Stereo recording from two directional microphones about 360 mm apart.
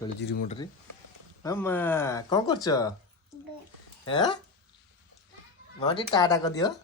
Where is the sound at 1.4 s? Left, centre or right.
Centre.